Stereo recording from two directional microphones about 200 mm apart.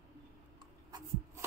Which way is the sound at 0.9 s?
20° right (ahead or behind).